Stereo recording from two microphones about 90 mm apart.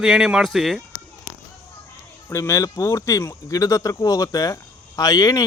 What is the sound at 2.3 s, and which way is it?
Speech, 35° left (ahead or behind).